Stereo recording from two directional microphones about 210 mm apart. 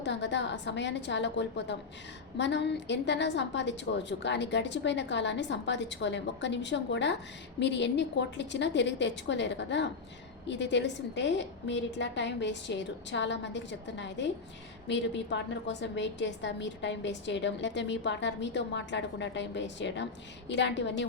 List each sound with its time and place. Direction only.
0.0 s a woman's voice: 55° left (ahead or behind)